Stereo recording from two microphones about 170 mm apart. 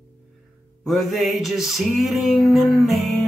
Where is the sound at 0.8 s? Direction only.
Centre (ahead or behind).